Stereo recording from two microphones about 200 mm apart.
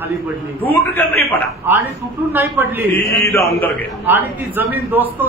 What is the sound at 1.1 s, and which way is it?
Speech, 50° right (ahead or behind).